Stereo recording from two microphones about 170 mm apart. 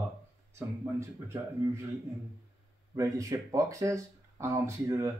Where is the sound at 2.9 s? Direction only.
20° right (ahead or behind).